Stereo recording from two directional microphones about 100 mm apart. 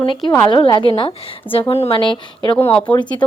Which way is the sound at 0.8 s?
60° left (ahead or behind).